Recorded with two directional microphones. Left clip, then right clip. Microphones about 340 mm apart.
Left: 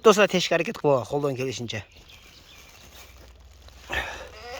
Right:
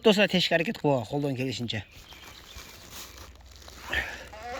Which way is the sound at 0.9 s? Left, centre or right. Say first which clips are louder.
Left 5 dB; left.